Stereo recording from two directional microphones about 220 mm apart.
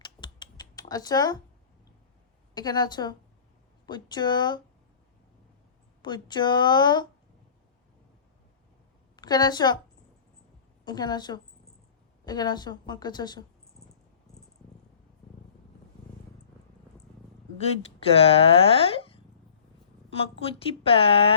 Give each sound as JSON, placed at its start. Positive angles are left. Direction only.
{"t": 0.0, "sound": "computer keyboard", "side_deg": 20}
{"t": 2.6, "sound": "speech", "side_deg": 20}
{"t": 6.0, "sound": "speech", "side_deg": 20}
{"t": 9.1, "sound": "a woman's voice", "side_deg": 20}
{"t": 10.8, "sound": "speech", "side_deg": 20}
{"t": 17.6, "sound": "speech", "side_deg": 25}